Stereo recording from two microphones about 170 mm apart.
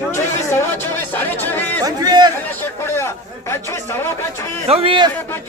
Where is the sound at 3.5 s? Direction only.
15° left (ahead or behind).